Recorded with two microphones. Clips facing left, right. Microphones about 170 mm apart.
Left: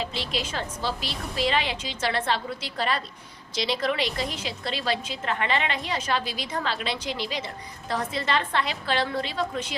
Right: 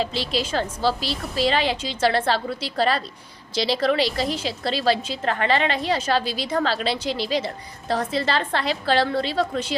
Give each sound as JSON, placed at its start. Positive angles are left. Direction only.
{"t": 0.0, "sound": "a woman's voice", "side_deg": -35}